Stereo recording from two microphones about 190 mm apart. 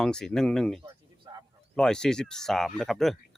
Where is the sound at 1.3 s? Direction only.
20° right (ahead or behind).